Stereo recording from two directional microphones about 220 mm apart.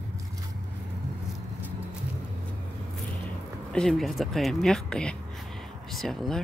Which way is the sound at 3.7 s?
Centre (ahead or behind).